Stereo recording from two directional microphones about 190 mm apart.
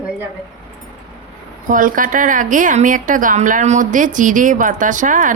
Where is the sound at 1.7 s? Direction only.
45° right (ahead or behind).